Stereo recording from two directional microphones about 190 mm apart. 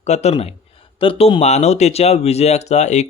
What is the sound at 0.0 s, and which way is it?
Speech, 35° left (ahead or behind).